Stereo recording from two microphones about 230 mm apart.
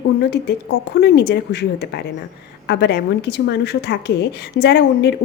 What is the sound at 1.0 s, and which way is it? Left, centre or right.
A woman's voice, left.